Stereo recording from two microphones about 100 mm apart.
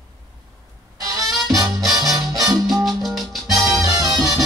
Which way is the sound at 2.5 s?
Centre (ahead or behind).